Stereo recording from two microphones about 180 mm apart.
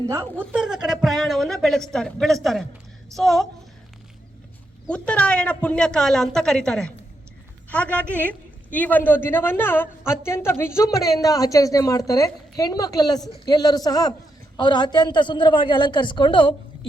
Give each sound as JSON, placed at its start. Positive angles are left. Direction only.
{"t": 0.1, "sound": "a woman's voice", "side_deg": -10}
{"t": 4.9, "sound": "a woman's voice", "side_deg": 5}